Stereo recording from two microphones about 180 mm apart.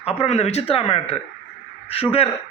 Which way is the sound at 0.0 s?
35° left (ahead or behind).